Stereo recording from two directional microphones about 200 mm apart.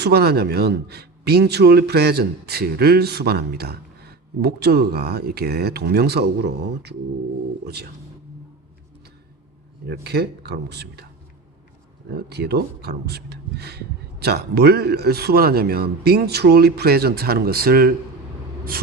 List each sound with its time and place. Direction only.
0.0 s a man's voice: 55° right (ahead or behind)
9.8 s speech: 55° right (ahead or behind)
12.1 s a man's voice: 55° right (ahead or behind)